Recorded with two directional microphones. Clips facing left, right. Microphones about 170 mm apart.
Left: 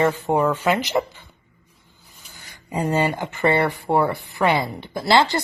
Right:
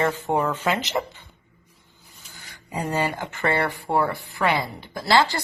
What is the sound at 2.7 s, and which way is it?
Speech, 25° left (ahead or behind).